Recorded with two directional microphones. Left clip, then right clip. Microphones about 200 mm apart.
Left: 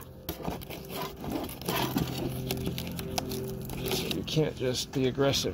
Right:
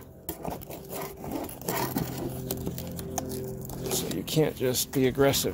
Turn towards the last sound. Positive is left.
turn(degrees=-20)  # may be behind; listen again after turning